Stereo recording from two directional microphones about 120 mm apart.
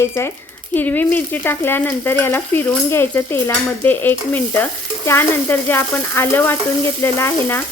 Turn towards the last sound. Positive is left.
turn(degrees=20)  # may be behind; listen again after turning